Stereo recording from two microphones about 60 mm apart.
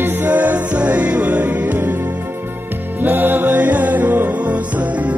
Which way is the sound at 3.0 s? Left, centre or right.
Right.